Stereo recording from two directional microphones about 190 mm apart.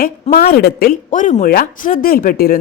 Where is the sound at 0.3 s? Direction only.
50° left (ahead or behind).